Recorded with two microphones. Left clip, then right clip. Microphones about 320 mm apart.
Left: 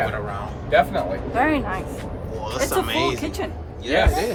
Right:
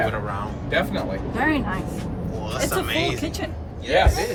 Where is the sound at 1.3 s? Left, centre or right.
Centre.